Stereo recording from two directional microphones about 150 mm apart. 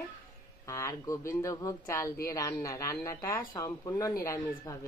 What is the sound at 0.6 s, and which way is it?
Speech, 20° left (ahead or behind).